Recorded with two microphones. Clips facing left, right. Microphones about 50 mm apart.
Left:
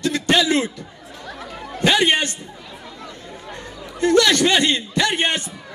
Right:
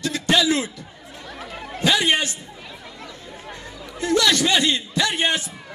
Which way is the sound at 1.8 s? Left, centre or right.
Left.